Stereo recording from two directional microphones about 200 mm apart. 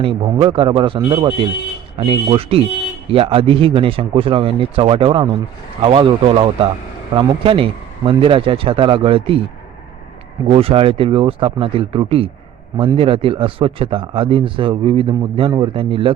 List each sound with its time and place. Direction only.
0.0 s speech: 25° right (ahead or behind)
10.5 s speech: 30° right (ahead or behind)